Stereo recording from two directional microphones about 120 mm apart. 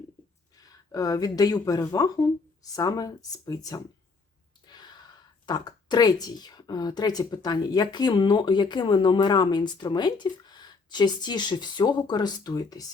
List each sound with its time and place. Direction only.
0.5 s a woman's voice: 30° left (ahead or behind)
4.6 s sigh: 35° left (ahead or behind)
5.5 s a woman's voice: 35° left (ahead or behind)